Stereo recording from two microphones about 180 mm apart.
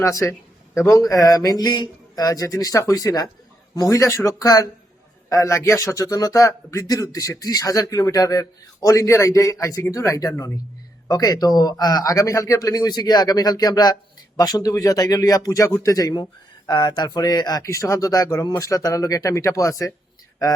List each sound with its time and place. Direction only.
0.0 s a man's voice: 15° left (ahead or behind)